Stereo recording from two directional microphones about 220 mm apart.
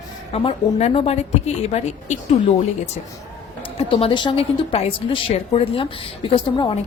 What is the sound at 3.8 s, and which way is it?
A woman's voice, 25° left (ahead or behind).